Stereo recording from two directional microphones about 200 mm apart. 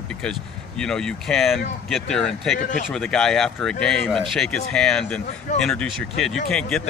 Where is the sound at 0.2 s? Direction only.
5° left (ahead or behind).